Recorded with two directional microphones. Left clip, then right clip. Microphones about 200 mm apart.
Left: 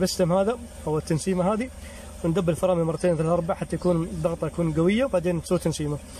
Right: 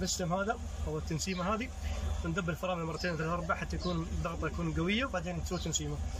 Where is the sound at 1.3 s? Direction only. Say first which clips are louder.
Left 8 dB; 40° left (ahead or behind).